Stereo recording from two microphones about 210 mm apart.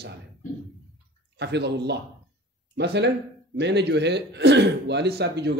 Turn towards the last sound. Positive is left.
turn(degrees=-50)  # may be behind; listen again after turning